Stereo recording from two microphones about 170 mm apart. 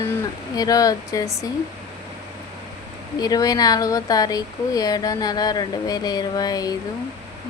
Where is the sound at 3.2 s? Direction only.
20° left (ahead or behind).